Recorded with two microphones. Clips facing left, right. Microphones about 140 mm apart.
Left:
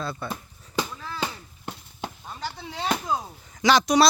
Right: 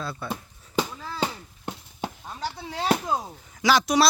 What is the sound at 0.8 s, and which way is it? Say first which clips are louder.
Chop: right 2 dB; 25° right (ahead or behind).